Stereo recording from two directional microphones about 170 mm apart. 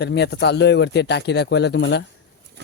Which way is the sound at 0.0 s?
80° left.